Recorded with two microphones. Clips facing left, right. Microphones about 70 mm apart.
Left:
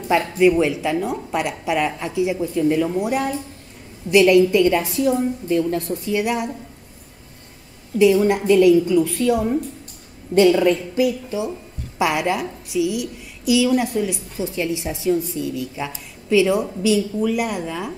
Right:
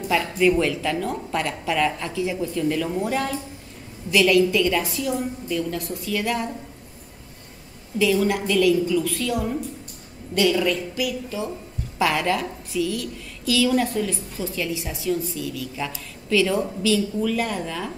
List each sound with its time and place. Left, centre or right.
0.1 s a woman's voice: left
8.0 s a woman's voice: left